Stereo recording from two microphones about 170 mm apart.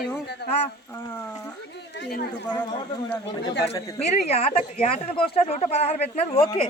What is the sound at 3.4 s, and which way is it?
Speech, 90° left.